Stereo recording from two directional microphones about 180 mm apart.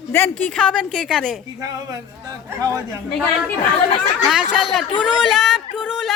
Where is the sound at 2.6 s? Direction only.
15° right (ahead or behind).